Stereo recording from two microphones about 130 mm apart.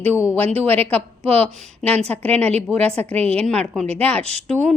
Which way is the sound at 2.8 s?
50° right (ahead or behind).